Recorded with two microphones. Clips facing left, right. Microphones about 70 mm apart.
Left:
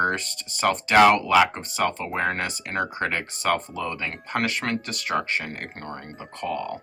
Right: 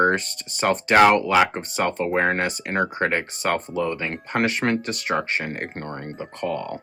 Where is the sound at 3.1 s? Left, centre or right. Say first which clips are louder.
Right 1 dB; right.